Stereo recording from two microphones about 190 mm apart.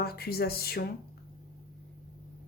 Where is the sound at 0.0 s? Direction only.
55° left (ahead or behind).